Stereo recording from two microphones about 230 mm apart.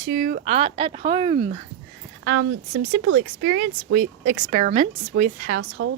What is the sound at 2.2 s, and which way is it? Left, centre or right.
Speech, right.